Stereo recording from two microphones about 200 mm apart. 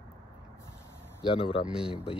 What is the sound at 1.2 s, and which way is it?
Speech, 25° left (ahead or behind).